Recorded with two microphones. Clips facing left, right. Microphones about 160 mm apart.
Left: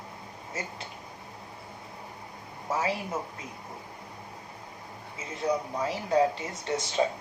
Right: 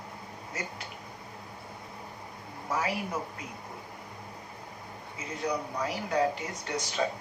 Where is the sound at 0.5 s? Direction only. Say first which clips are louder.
Left 1 dB; 25° left (ahead or behind).